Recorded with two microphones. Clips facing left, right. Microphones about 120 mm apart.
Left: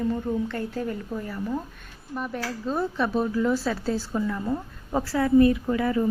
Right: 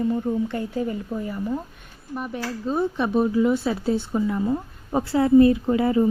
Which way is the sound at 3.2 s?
15° right (ahead or behind).